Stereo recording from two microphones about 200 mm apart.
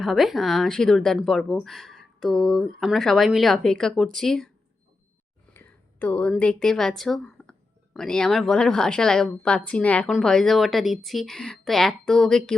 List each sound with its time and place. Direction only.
0.0 s speech: centre (ahead or behind)
5.5 s speech: 10° left (ahead or behind)